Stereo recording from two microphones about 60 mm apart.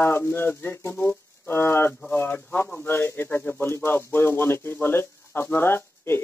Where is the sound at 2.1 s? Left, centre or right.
Left.